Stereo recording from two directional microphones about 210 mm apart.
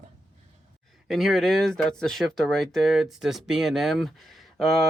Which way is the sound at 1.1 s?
Centre (ahead or behind).